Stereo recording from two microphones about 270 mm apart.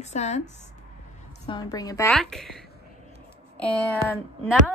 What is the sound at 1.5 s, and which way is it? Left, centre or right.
A woman's voice, centre.